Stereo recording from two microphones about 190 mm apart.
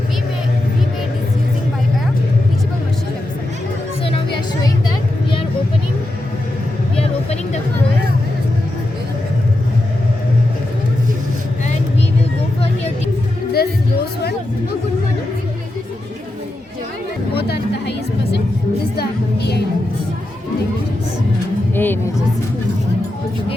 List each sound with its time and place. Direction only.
7.0 s music: 35° left (ahead or behind)
13.5 s music: 55° left (ahead or behind)
17.3 s music: 60° left (ahead or behind)
21.8 s music: 10° left (ahead or behind)